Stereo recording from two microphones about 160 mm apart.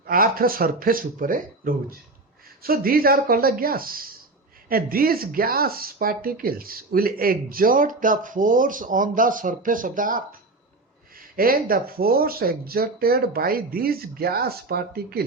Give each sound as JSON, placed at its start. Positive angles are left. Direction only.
{"t": 0.0, "sound": "speech", "side_deg": -65}
{"t": 11.3, "sound": "speech", "side_deg": -65}